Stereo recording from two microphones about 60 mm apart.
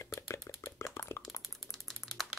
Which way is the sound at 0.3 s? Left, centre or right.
Left.